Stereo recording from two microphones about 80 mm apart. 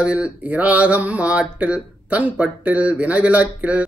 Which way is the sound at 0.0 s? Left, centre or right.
Centre.